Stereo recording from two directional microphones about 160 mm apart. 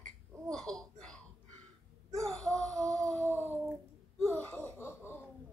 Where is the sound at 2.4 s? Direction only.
5° left (ahead or behind).